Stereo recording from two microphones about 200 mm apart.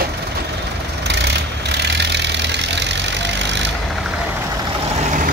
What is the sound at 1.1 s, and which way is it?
Vehicle, 60° right (ahead or behind).